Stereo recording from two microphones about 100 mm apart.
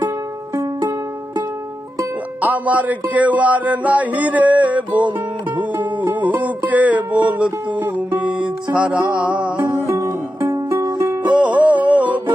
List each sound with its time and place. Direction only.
2.4 s music: 15° right (ahead or behind)
6.1 s music: 15° right (ahead or behind)
9.6 s music: 25° right (ahead or behind)
11.3 s music: 15° right (ahead or behind)